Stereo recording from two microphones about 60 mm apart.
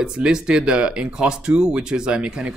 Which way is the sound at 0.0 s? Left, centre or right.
Centre.